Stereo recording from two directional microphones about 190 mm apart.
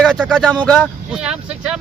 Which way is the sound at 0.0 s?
5° left (ahead or behind).